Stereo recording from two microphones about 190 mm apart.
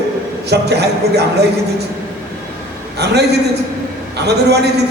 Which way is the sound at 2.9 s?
60° right (ahead or behind).